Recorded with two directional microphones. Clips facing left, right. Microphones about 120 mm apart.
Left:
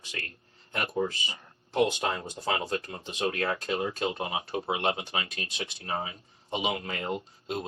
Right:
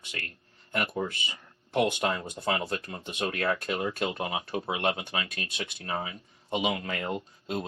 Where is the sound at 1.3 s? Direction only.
30° left (ahead or behind).